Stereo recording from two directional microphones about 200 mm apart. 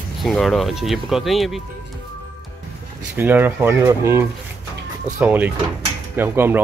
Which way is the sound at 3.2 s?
10° right (ahead or behind).